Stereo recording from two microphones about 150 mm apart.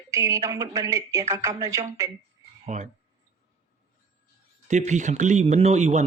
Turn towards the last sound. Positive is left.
turn(degrees=-50)  # may be behind; listen again after turning